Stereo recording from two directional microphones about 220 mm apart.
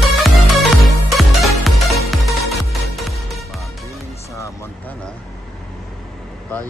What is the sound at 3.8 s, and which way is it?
Music, 15° left (ahead or behind).